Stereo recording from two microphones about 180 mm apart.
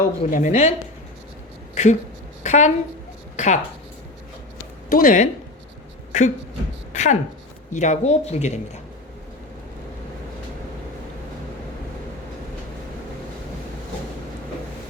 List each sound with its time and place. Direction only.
0.3 s speech: 45° left (ahead or behind)
1.7 s a woman's voice: 40° left (ahead or behind)
4.9 s a woman's voice: 50° left (ahead or behind)